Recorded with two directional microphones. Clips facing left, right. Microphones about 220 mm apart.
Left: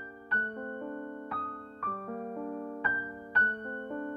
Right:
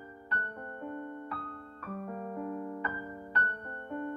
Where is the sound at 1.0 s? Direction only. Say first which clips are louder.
Left 1 dB; 45° left (ahead or behind).